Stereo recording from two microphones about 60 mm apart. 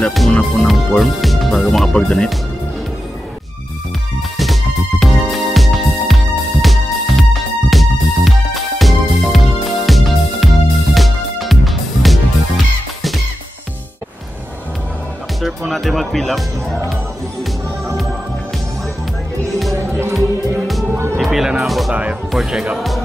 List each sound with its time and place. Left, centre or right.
0.3 s speech: centre
0.7 s speech: centre
4.4 s music: centre
15.4 s music: centre
19.9 s music: right
21.2 s music: centre
22.3 s speech: centre